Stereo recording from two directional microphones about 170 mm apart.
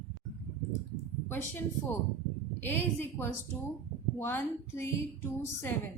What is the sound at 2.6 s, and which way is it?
A woman's voice, 10° left (ahead or behind).